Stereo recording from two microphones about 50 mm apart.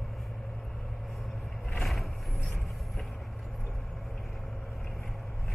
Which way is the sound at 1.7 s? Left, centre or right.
Centre.